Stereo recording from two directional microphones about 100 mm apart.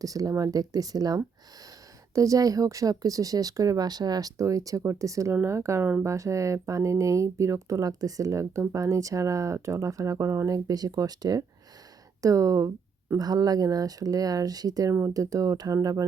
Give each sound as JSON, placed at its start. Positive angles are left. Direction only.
{"t": 0.0, "sound": "speech", "side_deg": -35}